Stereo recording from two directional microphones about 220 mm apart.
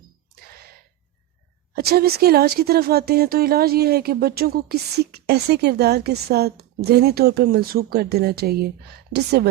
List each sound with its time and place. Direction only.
1.7 s speech: 45° right (ahead or behind)